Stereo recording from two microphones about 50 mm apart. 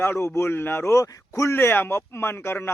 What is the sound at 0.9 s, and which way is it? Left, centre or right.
Speech, left.